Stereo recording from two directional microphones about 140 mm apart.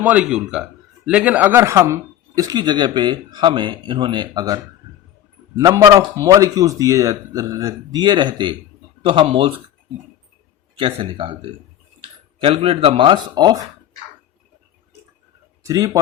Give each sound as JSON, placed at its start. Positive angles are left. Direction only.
{"t": 0.0, "sound": "speech", "side_deg": -10}
{"t": 10.8, "sound": "speech", "side_deg": -40}
{"t": 15.6, "sound": "speech", "side_deg": -25}